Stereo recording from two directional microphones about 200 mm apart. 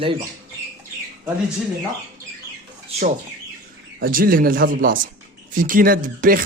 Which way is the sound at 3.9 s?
45° right (ahead or behind).